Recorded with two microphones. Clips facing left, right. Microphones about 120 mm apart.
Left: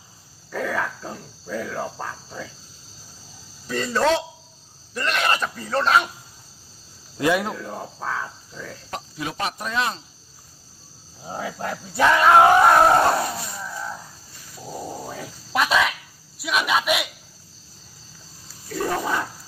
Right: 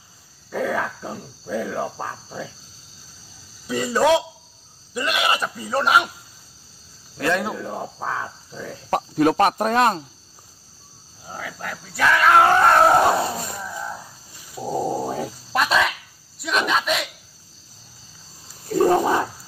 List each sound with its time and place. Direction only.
0.5 s speech: 15° right (ahead or behind)
3.6 s speech: 10° right (ahead or behind)
7.2 s speech: 15° left (ahead or behind)
7.4 s speech: 15° right (ahead or behind)
8.9 s speech: 55° right (ahead or behind)
11.2 s speech: 25° left (ahead or behind); by 13.2 s 5° right (ahead or behind)
13.6 s a sound: 10° right (ahead or behind)
14.6 s a sound: 40° right (ahead or behind)
15.5 s speech: centre (ahead or behind)